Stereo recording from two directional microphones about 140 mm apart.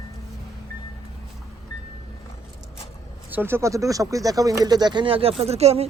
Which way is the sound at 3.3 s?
15° right (ahead or behind).